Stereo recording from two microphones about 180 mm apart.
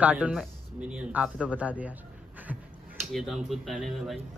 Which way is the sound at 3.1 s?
Centre (ahead or behind).